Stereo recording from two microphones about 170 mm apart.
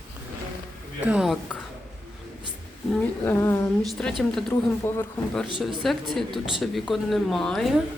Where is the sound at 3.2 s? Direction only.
15° left (ahead or behind).